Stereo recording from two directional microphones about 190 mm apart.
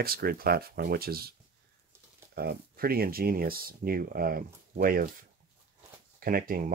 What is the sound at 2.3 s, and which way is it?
Speech, 55° right (ahead or behind).